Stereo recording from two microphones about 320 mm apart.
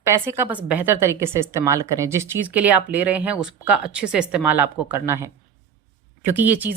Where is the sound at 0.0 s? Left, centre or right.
Centre.